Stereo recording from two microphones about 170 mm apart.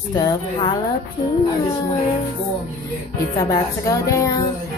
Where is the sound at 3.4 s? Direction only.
20° left (ahead or behind).